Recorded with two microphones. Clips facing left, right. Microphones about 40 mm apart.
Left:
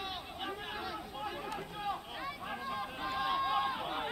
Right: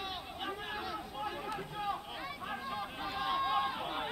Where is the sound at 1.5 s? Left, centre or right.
Centre.